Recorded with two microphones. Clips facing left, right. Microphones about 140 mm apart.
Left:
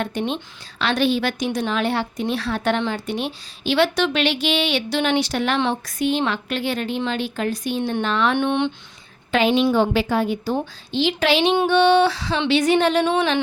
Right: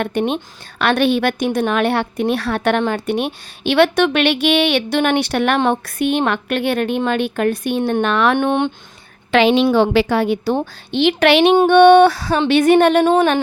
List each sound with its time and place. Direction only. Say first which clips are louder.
0.0 s a woman's voice: right 5 dB; 60° right (ahead or behind)
9.3 s a woman's voice: right 5 dB; 85° right; by 11.5 s 65° right (ahead or behind)
11.5 s a woman's voice: right 8 dB; 55° right (ahead or behind)